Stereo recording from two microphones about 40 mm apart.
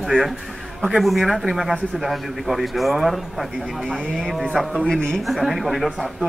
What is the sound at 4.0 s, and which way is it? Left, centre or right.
A man's voice, centre.